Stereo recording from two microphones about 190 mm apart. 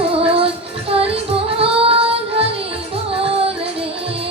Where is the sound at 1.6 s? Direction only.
30° right (ahead or behind).